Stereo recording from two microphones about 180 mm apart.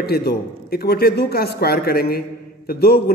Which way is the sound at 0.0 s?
60° left (ahead or behind).